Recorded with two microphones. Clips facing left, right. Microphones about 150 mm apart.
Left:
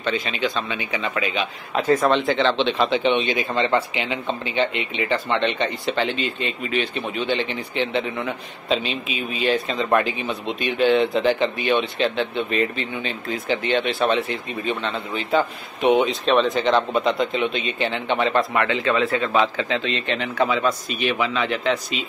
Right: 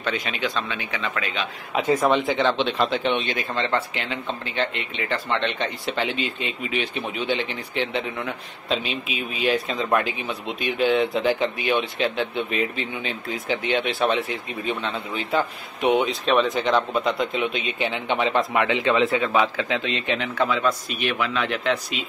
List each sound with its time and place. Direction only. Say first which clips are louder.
0.0 s speech: left 3 dB; centre (ahead or behind)
1.9 s speech: left 2 dB; 10° right (ahead or behind)
19.1 s speech: left 1 dB; 5° right (ahead or behind)